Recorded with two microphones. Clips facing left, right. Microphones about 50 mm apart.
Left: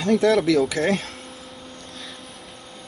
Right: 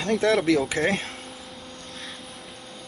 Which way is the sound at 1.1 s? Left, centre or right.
Centre.